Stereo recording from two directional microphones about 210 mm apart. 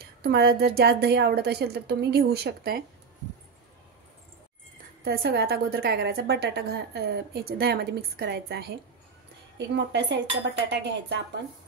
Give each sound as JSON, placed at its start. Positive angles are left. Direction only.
{"t": 0.0, "sound": "a woman's voice", "side_deg": -45}
{"t": 5.0, "sound": "a woman's voice", "side_deg": -50}